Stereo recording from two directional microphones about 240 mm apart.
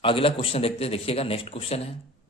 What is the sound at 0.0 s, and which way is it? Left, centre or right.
A man's voice, left.